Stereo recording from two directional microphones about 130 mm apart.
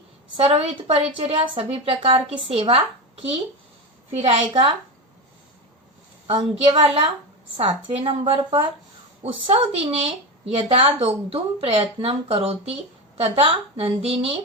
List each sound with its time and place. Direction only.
0.3 s a woman's voice: 50° right (ahead or behind)
4.1 s a woman's voice: 50° right (ahead or behind)
6.2 s a woman's voice: 45° right (ahead or behind)